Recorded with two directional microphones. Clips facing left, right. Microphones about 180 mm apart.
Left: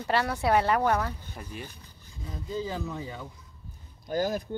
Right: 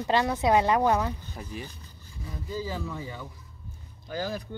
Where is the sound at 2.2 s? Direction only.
25° left (ahead or behind).